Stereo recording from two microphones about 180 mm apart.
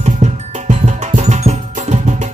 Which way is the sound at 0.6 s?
40° right (ahead or behind).